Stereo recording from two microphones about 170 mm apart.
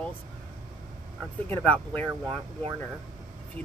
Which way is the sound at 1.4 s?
10° left (ahead or behind).